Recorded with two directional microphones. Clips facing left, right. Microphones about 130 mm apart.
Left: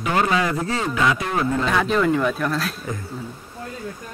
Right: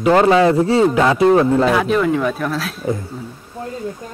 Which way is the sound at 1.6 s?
5° right (ahead or behind).